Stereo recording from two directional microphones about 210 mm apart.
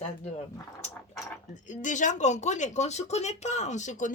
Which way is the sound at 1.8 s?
35° left (ahead or behind).